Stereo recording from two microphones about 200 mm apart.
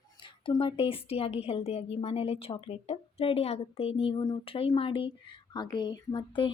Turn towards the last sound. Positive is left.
turn(degrees=25)  # may be behind; listen again after turning